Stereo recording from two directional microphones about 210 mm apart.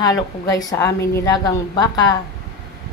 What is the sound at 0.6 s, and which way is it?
A woman's voice, 15° left (ahead or behind).